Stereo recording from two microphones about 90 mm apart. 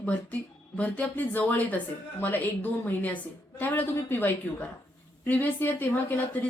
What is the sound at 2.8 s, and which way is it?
Speech, 20° left (ahead or behind).